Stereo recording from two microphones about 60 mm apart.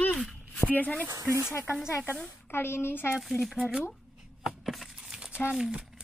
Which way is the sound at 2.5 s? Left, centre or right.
Left.